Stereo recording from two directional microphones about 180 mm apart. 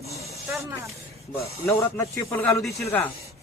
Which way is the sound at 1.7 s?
15° left (ahead or behind).